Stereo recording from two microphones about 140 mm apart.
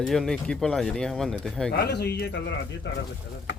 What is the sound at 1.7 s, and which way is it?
Speech, 90° left.